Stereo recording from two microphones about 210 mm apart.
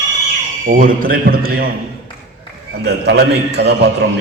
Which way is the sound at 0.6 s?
40° right (ahead or behind).